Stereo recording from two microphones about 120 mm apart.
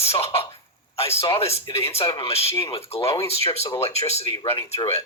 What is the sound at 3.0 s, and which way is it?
Speech, 25° left (ahead or behind).